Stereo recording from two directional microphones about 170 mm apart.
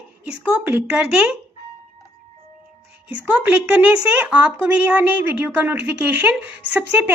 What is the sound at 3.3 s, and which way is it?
A woman's voice, 10° right (ahead or behind).